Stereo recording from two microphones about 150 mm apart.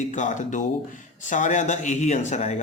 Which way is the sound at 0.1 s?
55° left (ahead or behind).